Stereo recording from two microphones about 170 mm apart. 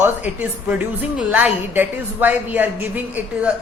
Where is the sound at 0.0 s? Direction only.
10° right (ahead or behind).